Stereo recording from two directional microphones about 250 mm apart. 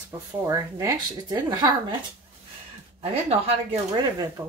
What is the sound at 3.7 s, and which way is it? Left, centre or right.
Speech, centre.